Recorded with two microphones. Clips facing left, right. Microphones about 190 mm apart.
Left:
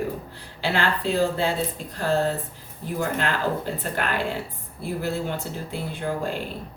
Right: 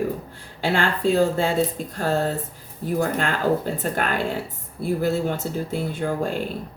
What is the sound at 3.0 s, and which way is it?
Speech, 50° right (ahead or behind).